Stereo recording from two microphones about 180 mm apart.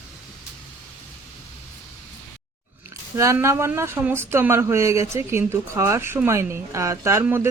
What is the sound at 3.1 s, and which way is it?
A woman's voice, 15° right (ahead or behind).